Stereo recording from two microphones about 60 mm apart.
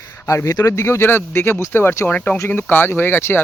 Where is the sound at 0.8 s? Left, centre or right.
Left.